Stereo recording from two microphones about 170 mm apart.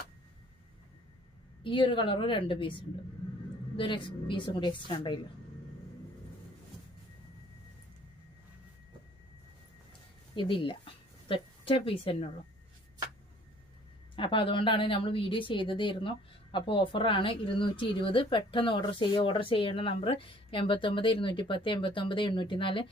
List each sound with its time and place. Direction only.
1.6 s a woman's voice: 30° left (ahead or behind)
10.3 s speech: 30° left (ahead or behind)
14.2 s a woman's voice: 30° left (ahead or behind)